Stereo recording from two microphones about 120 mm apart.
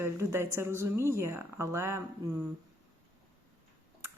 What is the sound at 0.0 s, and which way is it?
Speech, 20° right (ahead or behind).